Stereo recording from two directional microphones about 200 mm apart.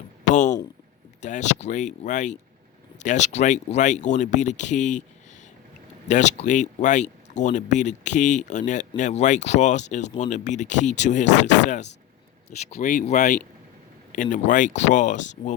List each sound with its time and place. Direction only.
1.2 s speech: 35° left (ahead or behind)
6.1 s speech: 35° left (ahead or behind)